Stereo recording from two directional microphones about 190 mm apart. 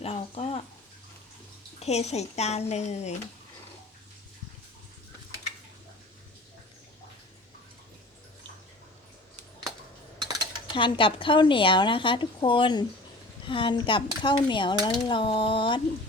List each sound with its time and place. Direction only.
0.0 s a sound: 30° left (ahead or behind)
1.8 s a woman's voice: 35° left (ahead or behind)
10.2 s cutlery: 20° right (ahead or behind)
10.8 s speech: 25° left (ahead or behind)